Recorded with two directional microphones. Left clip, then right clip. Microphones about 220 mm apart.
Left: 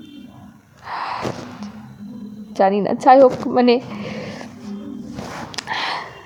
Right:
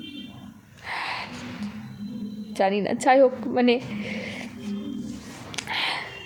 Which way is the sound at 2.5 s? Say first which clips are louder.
Left 7 dB; 5° left (ahead or behind).